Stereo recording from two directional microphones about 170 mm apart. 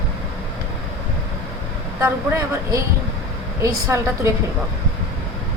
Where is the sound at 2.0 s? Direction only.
15° right (ahead or behind).